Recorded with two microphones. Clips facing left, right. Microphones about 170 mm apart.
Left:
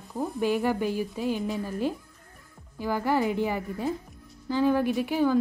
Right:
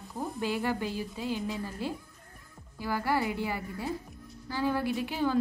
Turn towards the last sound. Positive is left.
turn(degrees=15)  # may be behind; listen again after turning